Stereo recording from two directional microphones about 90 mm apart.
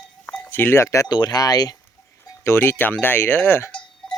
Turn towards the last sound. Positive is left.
turn(degrees=25)  # may be behind; listen again after turning